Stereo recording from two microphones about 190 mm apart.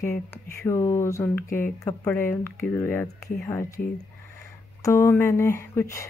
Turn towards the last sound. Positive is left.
turn(degrees=15)  # may be behind; listen again after turning